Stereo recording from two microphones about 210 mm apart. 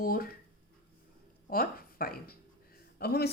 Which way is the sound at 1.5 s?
45° left (ahead or behind).